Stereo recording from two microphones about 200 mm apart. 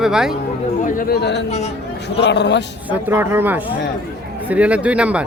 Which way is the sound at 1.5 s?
35° left (ahead or behind).